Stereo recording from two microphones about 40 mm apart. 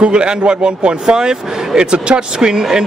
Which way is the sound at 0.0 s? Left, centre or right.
Right.